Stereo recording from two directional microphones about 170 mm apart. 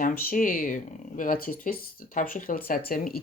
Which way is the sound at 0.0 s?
55° left (ahead or behind).